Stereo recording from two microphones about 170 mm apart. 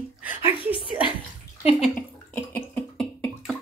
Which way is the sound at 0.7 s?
30° left (ahead or behind).